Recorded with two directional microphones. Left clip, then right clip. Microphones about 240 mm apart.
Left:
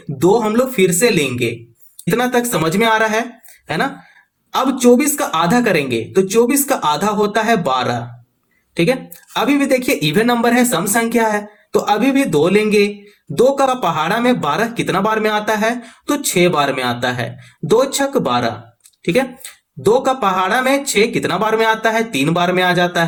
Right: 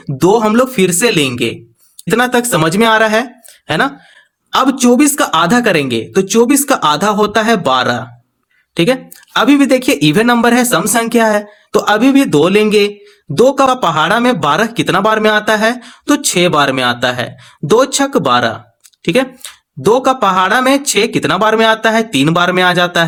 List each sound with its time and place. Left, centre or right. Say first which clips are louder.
0.2 s speech: right 4 dB; right